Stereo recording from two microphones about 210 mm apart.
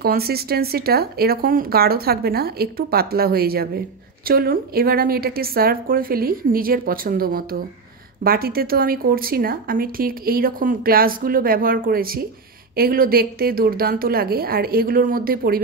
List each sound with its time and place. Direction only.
0.0 s speech: 45° right (ahead or behind)